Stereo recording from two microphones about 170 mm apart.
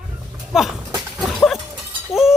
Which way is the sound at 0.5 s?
Centre (ahead or behind).